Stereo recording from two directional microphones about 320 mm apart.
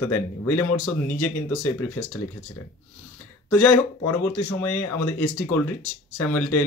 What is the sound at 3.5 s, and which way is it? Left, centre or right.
Speech, centre.